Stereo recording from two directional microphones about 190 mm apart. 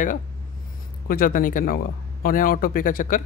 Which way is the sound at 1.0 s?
50° left (ahead or behind).